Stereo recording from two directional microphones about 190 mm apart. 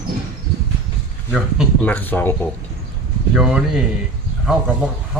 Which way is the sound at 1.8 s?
10° left (ahead or behind).